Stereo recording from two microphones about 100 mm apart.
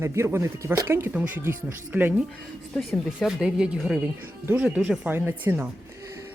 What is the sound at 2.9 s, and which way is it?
Speech, 5° right (ahead or behind).